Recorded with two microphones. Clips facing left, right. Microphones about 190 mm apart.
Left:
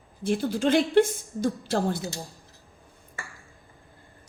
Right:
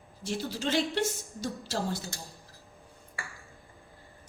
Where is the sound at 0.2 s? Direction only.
55° left (ahead or behind).